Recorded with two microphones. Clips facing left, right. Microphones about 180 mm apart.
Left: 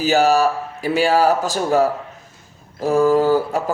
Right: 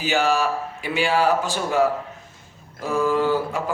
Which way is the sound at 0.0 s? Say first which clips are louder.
Left 6 dB; 40° left (ahead or behind).